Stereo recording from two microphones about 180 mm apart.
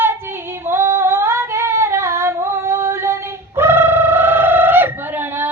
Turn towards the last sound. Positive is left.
turn(degrees=-10)  # may be behind; listen again after turning